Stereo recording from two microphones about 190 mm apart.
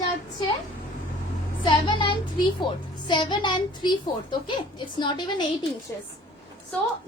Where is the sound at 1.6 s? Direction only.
25° left (ahead or behind).